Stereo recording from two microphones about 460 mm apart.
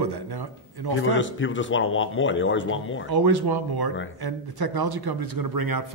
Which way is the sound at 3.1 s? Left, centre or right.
Right.